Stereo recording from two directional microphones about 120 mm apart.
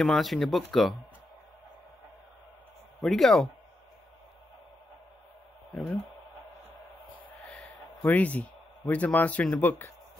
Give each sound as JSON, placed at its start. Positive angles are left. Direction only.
{"t": 0.0, "sound": "speech", "side_deg": 0}
{"t": 3.0, "sound": "speech", "side_deg": 0}
{"t": 7.4, "sound": "speech", "side_deg": 10}